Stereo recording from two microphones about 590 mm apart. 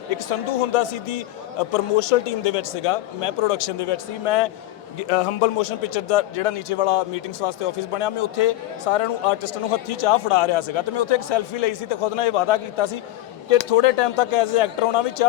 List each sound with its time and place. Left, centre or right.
0.7 s a man's voice: left